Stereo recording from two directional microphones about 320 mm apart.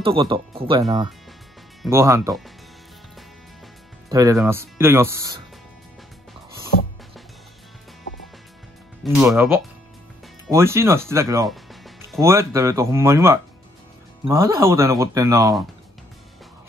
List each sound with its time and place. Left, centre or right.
0.0 s speech: centre
4.1 s speech: centre
9.0 s speech: centre